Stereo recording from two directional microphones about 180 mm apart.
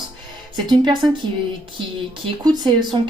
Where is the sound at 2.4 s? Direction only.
25° right (ahead or behind).